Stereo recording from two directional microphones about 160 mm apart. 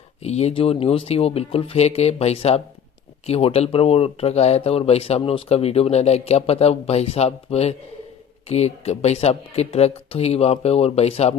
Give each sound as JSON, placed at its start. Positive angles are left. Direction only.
{"t": 0.2, "sound": "speech", "side_deg": 40}